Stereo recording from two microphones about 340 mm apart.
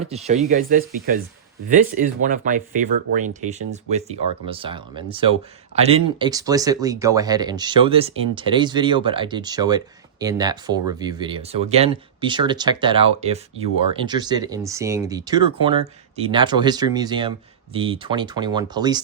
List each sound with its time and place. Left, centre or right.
0.1 s speech: centre
2.2 s speech: right